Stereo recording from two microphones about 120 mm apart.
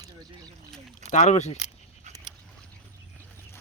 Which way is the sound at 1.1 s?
75° left (ahead or behind).